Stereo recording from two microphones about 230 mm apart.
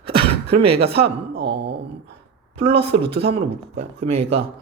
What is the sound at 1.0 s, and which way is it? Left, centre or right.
Speech, right.